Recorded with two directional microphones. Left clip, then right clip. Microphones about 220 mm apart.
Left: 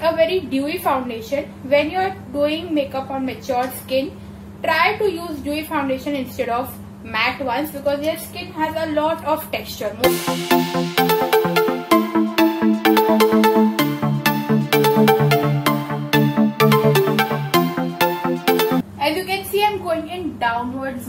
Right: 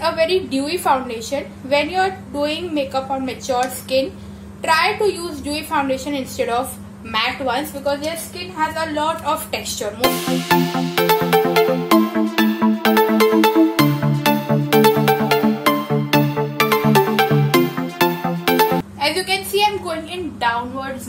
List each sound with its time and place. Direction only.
0.0 s a woman's voice: 30° right (ahead or behind)
5.5 s a woman's voice: 30° right (ahead or behind)
10.0 s music: centre (ahead or behind)
18.9 s a sound: 20° right (ahead or behind)